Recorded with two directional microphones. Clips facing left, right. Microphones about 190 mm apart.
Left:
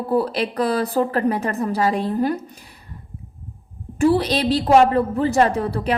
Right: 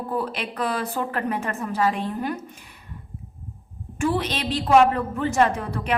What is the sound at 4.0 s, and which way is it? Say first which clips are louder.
A woman's voice: left 7 dB; 35° left (ahead or behind).